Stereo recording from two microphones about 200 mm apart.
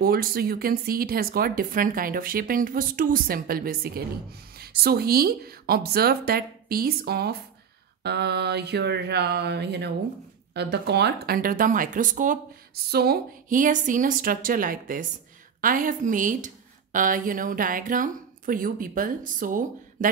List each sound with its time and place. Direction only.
0.0 s a woman's voice: 45° right (ahead or behind)
8.0 s mantra: 55° right (ahead or behind)
10.5 s a woman's voice: 55° right (ahead or behind)